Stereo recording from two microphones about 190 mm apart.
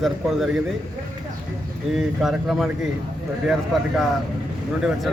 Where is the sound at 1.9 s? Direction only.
Centre (ahead or behind).